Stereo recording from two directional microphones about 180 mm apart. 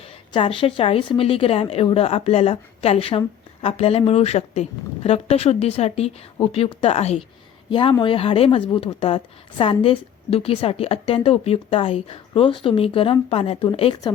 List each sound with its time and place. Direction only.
0.0 s speech: 30° left (ahead or behind)